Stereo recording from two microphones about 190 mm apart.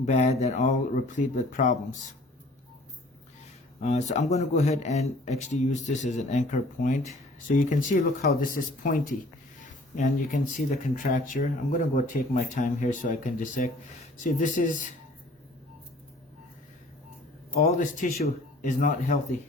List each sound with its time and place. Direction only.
0.0 s speech: 35° left (ahead or behind)
3.8 s speech: 35° left (ahead or behind)
17.6 s speech: 40° left (ahead or behind)